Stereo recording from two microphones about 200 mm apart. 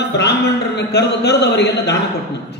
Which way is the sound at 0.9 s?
55° left (ahead or behind).